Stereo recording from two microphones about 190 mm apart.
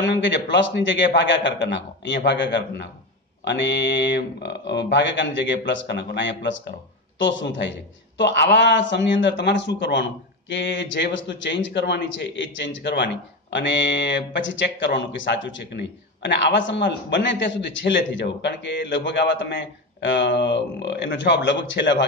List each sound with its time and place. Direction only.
0.0 s a man's voice: 65° left (ahead or behind)